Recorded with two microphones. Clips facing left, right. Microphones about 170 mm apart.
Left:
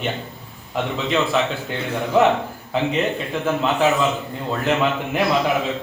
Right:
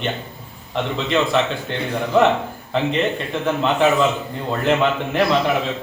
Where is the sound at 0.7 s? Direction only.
5° left (ahead or behind).